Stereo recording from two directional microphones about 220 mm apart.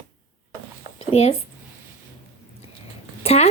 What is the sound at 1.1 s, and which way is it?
Speech, 30° left (ahead or behind).